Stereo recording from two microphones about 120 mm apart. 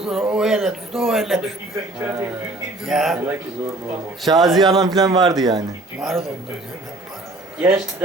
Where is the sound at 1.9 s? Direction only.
25° right (ahead or behind).